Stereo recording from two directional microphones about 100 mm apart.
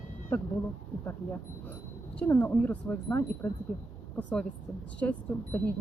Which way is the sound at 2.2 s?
25° left (ahead or behind).